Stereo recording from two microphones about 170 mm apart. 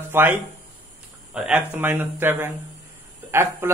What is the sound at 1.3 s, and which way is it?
Speech, 5° right (ahead or behind).